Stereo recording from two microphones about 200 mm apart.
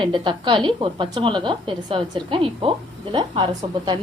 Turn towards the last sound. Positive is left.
turn(degrees=-25)  # may be behind; listen again after turning